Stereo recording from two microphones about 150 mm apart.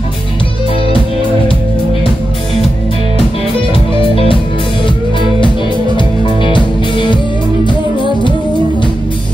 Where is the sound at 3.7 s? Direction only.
35° left (ahead or behind).